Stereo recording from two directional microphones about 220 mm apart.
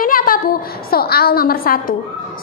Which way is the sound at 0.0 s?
40° left (ahead or behind).